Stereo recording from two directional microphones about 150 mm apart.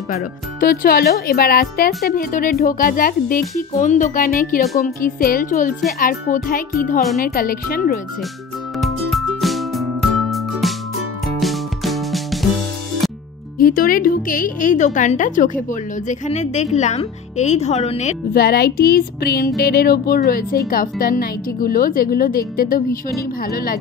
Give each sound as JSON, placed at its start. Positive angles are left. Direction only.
{"t": 0.6, "sound": "speech", "side_deg": 90}
{"t": 2.0, "sound": "a woman's voice", "side_deg": 70}
{"t": 5.9, "sound": "speech", "side_deg": 75}
{"t": 7.2, "sound": "speech", "side_deg": 80}
{"t": 8.7, "sound": "music", "side_deg": 0}
{"t": 13.6, "sound": "a woman's voice", "side_deg": 75}
{"t": 18.3, "sound": "music", "side_deg": 90}
{"t": 23.4, "sound": "music", "side_deg": 85}